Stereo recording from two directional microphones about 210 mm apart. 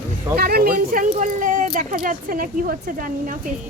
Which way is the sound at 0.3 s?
45° right (ahead or behind).